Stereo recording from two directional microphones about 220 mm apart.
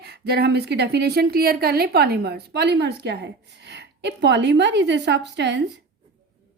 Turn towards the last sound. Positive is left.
turn(degrees=-50)  # may be behind; listen again after turning